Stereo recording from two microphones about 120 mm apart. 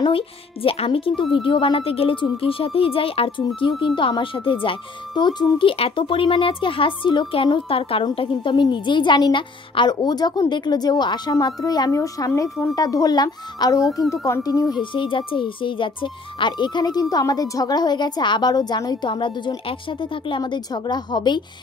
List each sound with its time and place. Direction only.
0.0 s a woman's voice: 50° left (ahead or behind); by 14.8 s 30° left (ahead or behind)
14.8 s a woman's voice: 45° left (ahead or behind)